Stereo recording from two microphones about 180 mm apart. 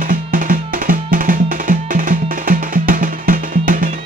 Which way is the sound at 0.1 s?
50° right (ahead or behind).